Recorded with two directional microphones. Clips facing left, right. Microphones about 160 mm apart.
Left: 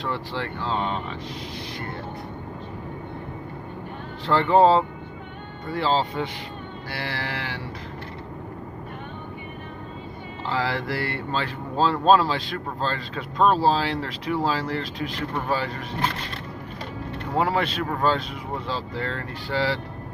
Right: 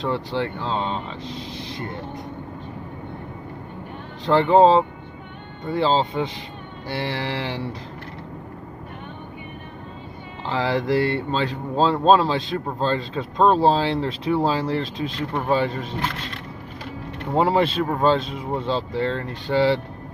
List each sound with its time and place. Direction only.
0.0 s speech: 20° right (ahead or behind)
4.3 s speech: 20° right (ahead or behind)
10.4 s speech: 20° right (ahead or behind)
17.3 s speech: 25° right (ahead or behind)